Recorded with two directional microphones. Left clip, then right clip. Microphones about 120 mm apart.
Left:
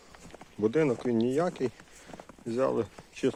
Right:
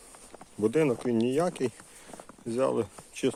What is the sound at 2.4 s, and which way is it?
Speech, 30° right (ahead or behind).